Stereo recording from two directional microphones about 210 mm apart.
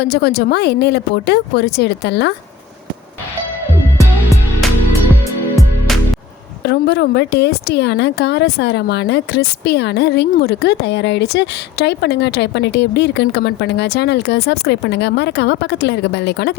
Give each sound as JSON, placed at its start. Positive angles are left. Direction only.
{"t": 0.0, "sound": "a woman's voice", "side_deg": 50}
{"t": 6.6, "sound": "a woman's voice", "side_deg": 50}